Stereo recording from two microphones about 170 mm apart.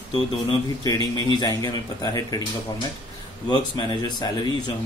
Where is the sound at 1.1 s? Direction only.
25° left (ahead or behind).